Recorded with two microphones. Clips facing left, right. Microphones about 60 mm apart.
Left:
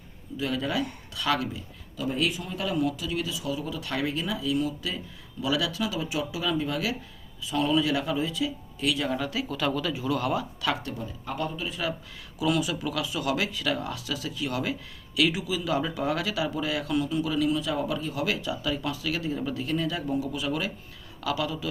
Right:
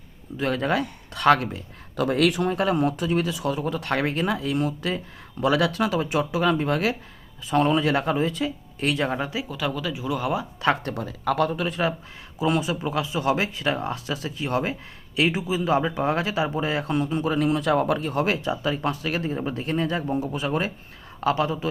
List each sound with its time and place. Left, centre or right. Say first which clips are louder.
0.3 s speech: right 5 dB; right
9.5 s speech: even; centre
10.6 s speech: right 6 dB; right
10.9 s speech: right 9 dB; right
11.6 s speech: right 6 dB; right
12.4 s speech: right 3 dB; right
18.4 s speech: right 4 dB; right